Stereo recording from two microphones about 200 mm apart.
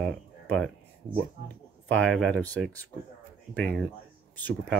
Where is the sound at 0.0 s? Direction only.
5° left (ahead or behind).